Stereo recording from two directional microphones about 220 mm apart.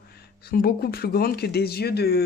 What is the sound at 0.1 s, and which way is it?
Speech, 45° left (ahead or behind).